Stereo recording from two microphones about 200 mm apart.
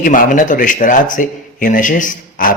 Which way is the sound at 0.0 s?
40° left (ahead or behind).